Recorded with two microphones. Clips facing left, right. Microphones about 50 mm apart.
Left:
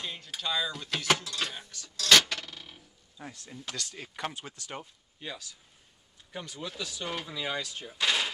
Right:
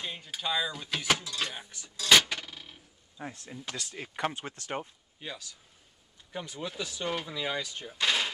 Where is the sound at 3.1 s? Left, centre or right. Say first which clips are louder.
Right 3 dB; centre.